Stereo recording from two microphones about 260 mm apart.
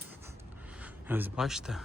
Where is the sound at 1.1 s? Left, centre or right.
Centre.